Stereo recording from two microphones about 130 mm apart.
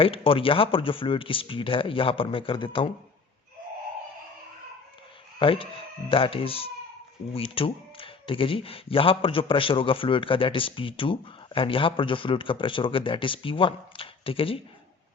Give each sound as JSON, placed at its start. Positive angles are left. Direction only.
{"t": 0.0, "sound": "speech", "side_deg": 45}
{"t": 5.4, "sound": "speech", "side_deg": 45}